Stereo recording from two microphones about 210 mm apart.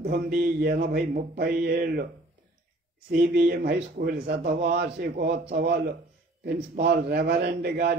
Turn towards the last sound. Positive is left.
turn(degrees=-50)  # may be behind; listen again after turning